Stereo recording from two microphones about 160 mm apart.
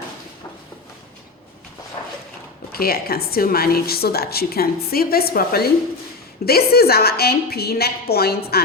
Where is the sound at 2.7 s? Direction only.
70° left (ahead or behind).